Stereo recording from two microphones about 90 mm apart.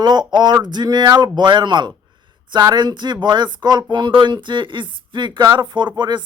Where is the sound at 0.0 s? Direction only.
55° right (ahead or behind).